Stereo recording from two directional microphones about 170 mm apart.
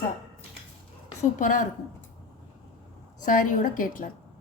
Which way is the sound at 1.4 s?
50° left (ahead or behind).